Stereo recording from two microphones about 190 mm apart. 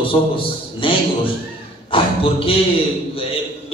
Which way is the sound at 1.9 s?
30° left (ahead or behind).